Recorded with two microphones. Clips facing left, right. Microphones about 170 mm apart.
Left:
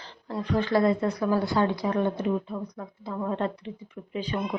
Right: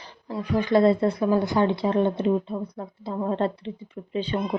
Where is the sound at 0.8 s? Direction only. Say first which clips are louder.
Right 4 dB; 30° right (ahead or behind).